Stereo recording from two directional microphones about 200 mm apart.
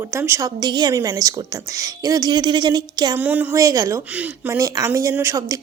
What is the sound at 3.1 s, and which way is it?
A woman's voice, 10° right (ahead or behind).